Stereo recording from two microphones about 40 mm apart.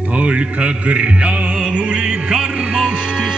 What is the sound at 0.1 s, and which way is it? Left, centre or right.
Music, right.